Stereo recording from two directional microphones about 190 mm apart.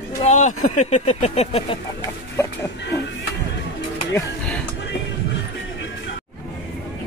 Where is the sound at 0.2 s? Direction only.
35° left (ahead or behind).